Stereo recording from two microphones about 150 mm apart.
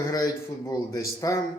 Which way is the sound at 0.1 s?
20° left (ahead or behind).